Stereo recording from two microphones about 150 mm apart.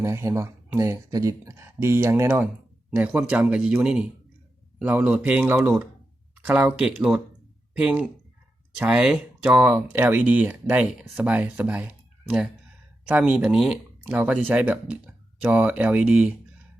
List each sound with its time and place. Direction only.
0.0 s speech: 20° right (ahead or behind)